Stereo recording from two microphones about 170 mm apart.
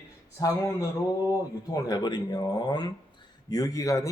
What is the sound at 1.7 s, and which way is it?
Speech, 25° left (ahead or behind).